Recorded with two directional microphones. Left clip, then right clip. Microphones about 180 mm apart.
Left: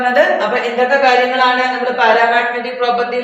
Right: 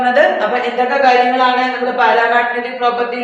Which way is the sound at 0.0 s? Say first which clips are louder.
Even; 20° right (ahead or behind).